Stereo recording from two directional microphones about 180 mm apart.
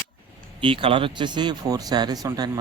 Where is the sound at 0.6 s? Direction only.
30° right (ahead or behind).